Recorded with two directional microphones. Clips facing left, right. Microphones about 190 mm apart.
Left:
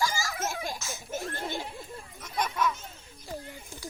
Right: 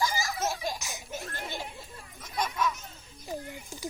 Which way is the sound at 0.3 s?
55° left (ahead or behind).